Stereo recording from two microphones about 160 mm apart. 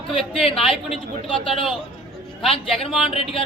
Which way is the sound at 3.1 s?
35° left (ahead or behind).